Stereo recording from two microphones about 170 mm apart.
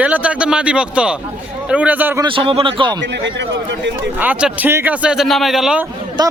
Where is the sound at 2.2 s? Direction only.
30° right (ahead or behind).